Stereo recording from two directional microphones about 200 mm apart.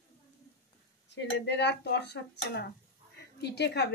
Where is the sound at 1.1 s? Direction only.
60° left (ahead or behind).